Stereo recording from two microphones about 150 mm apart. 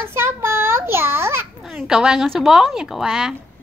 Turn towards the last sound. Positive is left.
turn(degrees=-5)  # may be behind; listen again after turning